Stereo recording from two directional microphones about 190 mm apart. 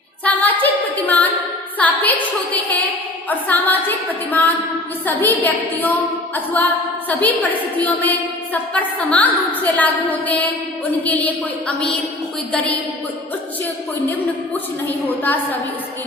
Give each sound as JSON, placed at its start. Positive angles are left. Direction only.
{"t": 0.3, "sound": "a capella", "side_deg": 10}
{"t": 1.8, "sound": "a woman's voice", "side_deg": 10}
{"t": 3.2, "sound": "a woman's voice", "side_deg": 10}
{"t": 7.8, "sound": "a woman's voice", "side_deg": 10}
{"t": 15.0, "sound": "a woman's voice", "side_deg": 10}